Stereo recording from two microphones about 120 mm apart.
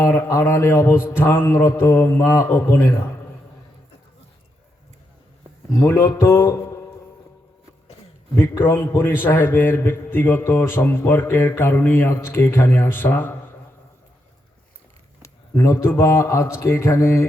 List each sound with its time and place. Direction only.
0.0 s a man's voice: 25° left (ahead or behind)
5.8 s a man's voice: 25° left (ahead or behind)
8.4 s a man's voice: 25° left (ahead or behind)
15.2 s a man's voice: 25° left (ahead or behind)